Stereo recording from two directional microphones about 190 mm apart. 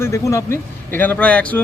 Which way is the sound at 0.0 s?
15° left (ahead or behind).